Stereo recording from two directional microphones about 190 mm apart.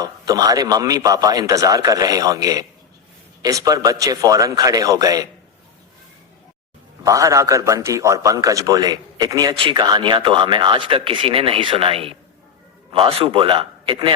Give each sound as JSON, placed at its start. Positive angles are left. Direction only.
{"t": 0.0, "sound": "a man's voice", "side_deg": -20}
{"t": 7.0, "sound": "a man's voice", "side_deg": -15}